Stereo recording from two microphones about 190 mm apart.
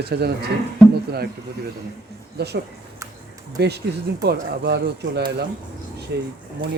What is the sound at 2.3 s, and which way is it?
Speech, 60° right (ahead or behind).